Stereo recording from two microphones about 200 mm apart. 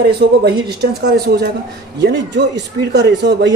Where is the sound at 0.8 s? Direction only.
55° right (ahead or behind).